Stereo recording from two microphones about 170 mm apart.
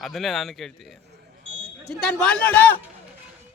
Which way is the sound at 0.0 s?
Centre (ahead or behind).